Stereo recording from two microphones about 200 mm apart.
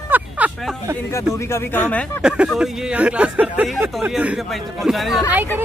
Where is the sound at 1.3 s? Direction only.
15° left (ahead or behind).